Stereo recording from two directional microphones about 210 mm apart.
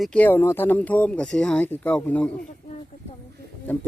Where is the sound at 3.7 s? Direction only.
10° left (ahead or behind).